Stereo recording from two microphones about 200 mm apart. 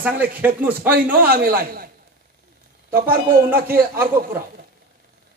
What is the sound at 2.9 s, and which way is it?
A man's voice, 45° right (ahead or behind).